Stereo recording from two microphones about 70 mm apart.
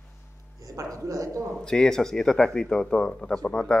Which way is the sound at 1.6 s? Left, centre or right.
Centre.